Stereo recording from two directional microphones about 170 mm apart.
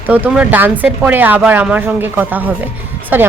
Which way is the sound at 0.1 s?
10° right (ahead or behind).